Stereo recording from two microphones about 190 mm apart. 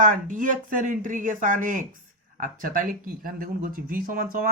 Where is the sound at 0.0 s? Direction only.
45° right (ahead or behind).